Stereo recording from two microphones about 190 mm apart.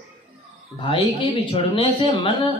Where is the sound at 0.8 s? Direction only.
25° left (ahead or behind).